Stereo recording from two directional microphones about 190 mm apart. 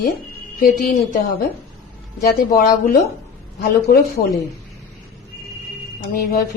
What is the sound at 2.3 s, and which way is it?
Speech, 50° left (ahead or behind).